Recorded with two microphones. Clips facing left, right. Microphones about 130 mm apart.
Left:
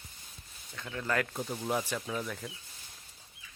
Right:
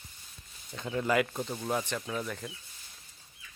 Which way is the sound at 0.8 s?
15° right (ahead or behind).